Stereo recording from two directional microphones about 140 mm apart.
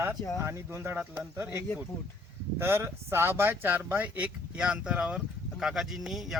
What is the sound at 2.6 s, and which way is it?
Speech, 15° right (ahead or behind).